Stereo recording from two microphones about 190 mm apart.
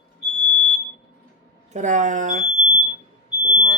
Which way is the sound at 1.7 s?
40° right (ahead or behind).